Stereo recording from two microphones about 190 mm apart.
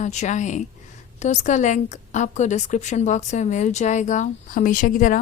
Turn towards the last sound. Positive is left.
turn(degrees=45)  # may be behind; listen again after turning